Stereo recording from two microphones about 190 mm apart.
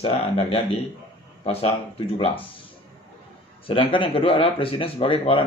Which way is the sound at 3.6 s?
25° left (ahead or behind).